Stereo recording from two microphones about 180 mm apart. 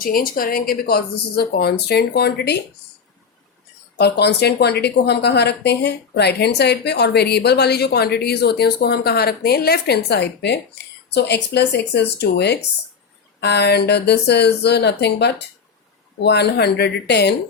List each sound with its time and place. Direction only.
0.0 s a woman's voice: 50° left (ahead or behind)
3.9 s a woman's voice: 65° left (ahead or behind)